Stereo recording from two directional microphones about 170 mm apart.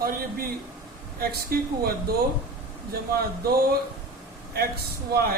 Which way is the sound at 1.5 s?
65° right (ahead or behind).